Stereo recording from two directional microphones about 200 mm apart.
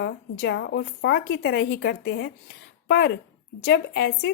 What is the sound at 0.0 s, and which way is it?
A woman's voice, 60° left (ahead or behind).